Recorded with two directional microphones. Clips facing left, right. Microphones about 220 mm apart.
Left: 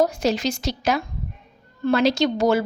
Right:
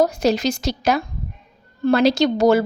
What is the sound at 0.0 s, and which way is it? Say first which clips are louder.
A woman's voice: right 3 dB; 40° right (ahead or behind).